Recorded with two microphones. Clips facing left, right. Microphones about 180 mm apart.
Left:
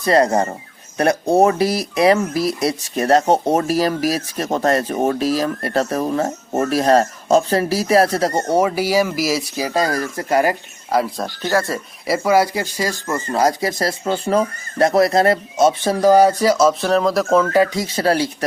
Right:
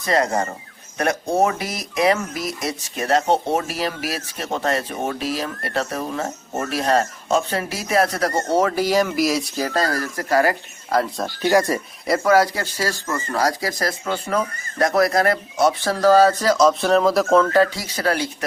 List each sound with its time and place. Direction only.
0.0 s speech: 35° left (ahead or behind)
10.9 s speech: 5° left (ahead or behind)
11.4 s speech: 15° right (ahead or behind)
12.0 s speech: 10° left (ahead or behind)
17.8 s speech: 30° left (ahead or behind)